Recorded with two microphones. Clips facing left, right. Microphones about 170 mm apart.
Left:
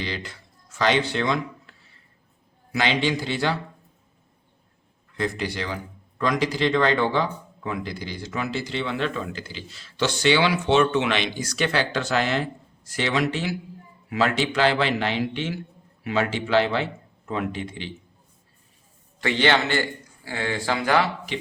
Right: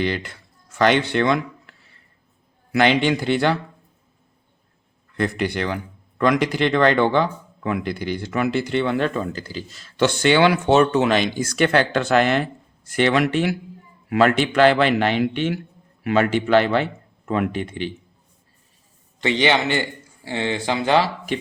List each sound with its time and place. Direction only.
0.0 s speech: 55° right (ahead or behind)
2.7 s speech: 55° right (ahead or behind)
5.1 s speech: 60° right (ahead or behind)
19.2 s speech: 15° right (ahead or behind)